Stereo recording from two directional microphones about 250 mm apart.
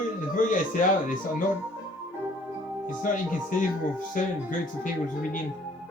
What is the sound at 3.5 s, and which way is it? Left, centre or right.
Speech, left.